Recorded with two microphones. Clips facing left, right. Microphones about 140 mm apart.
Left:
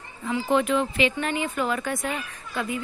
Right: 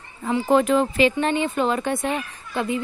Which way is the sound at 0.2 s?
40° right (ahead or behind).